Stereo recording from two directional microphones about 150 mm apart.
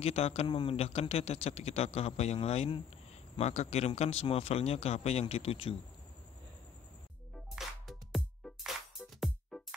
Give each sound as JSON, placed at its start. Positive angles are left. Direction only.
{"t": 0.0, "sound": "speech", "side_deg": 45}
{"t": 7.5, "sound": "music", "side_deg": 0}